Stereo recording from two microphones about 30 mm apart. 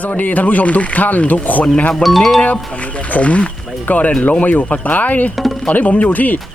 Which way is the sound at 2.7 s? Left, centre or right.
Left.